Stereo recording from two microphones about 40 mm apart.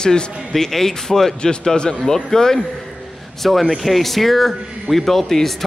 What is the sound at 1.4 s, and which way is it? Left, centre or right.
A man's voice, centre.